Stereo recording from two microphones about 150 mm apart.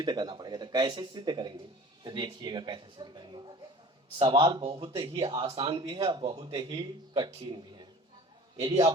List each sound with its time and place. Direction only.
0.0 s speech: 30° right (ahead or behind)